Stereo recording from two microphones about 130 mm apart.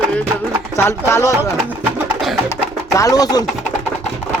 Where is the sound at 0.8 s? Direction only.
20° left (ahead or behind).